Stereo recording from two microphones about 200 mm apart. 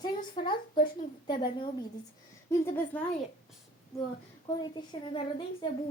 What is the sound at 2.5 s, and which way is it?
Speech, 10° left (ahead or behind).